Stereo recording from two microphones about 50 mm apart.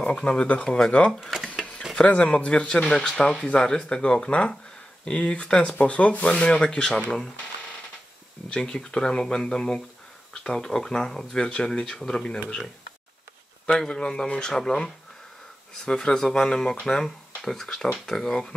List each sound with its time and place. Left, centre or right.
0.2 s speech: left
2.0 s speech: left
8.5 s speech: centre
13.7 s speech: centre
15.8 s speech: centre